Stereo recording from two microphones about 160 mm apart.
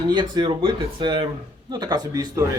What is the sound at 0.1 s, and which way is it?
Speech, 30° right (ahead or behind).